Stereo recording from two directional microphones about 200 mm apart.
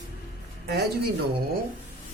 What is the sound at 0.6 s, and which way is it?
Speech, 55° right (ahead or behind).